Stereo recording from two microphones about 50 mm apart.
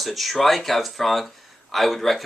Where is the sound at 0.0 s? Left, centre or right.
Centre.